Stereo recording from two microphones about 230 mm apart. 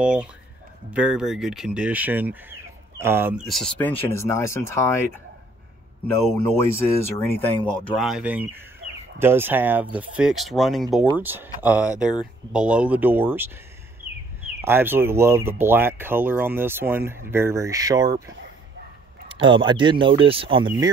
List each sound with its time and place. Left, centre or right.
0.0 s speech: centre
7.2 s speech: centre
14.6 s speech: centre
19.2 s speech: right